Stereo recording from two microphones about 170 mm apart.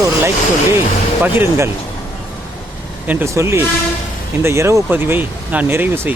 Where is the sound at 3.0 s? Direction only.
10° right (ahead or behind).